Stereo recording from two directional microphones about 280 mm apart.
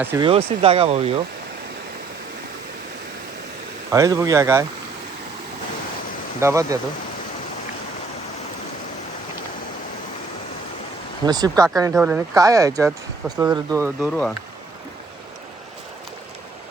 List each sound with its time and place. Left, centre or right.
0.0 s speech: centre
0.3 s speech: right
3.9 s speech: centre
6.4 s speech: centre
11.3 s speech: centre